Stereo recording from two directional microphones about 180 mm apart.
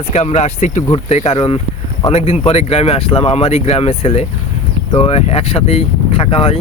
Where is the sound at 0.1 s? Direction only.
40° left (ahead or behind).